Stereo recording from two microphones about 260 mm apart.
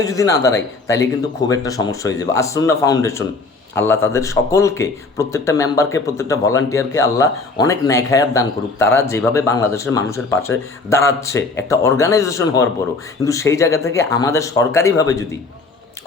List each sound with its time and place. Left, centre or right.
0.0 s speech: centre